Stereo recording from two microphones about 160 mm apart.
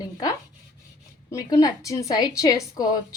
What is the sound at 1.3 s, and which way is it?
A woman's voice, 20° left (ahead or behind).